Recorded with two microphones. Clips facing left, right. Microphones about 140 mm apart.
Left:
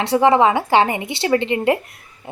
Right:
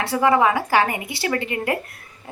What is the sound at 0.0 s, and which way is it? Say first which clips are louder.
Speech: left 4 dB; 25° left (ahead or behind).